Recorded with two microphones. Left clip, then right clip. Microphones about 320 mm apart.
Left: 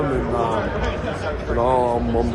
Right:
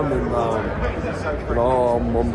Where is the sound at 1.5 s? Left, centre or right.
Centre.